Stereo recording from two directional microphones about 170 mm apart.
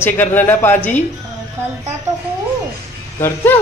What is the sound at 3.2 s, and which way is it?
Speech, 15° left (ahead or behind).